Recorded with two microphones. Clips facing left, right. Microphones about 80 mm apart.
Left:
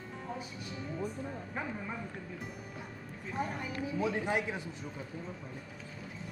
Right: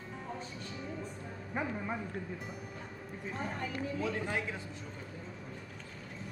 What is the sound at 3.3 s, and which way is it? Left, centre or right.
A man's voice, centre.